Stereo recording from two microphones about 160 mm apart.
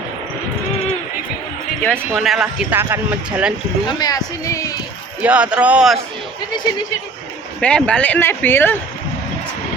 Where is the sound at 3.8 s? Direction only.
25° left (ahead or behind).